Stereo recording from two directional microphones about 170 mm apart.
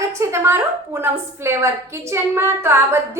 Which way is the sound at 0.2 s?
15° right (ahead or behind).